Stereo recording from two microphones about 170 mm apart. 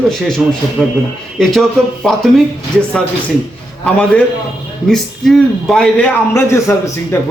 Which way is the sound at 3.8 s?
5° left (ahead or behind).